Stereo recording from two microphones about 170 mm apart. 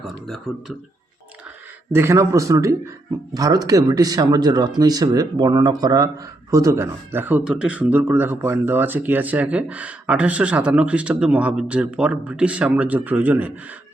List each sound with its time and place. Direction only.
1.9 s speech: 15° right (ahead or behind)